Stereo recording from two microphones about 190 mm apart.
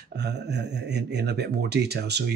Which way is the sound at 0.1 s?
60° right (ahead or behind).